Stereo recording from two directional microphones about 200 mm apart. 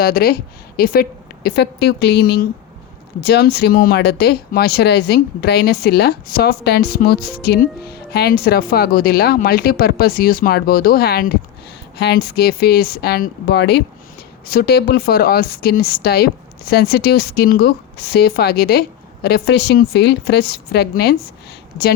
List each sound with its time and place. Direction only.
0.0 s speech: 50° left (ahead or behind)